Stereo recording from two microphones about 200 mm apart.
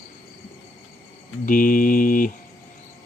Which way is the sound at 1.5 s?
45° left (ahead or behind).